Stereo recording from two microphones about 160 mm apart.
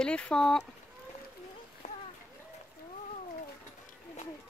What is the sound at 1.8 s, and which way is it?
Splash, 50° left (ahead or behind).